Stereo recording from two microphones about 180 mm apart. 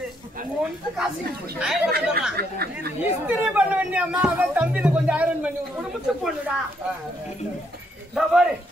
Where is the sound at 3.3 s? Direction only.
10° right (ahead or behind).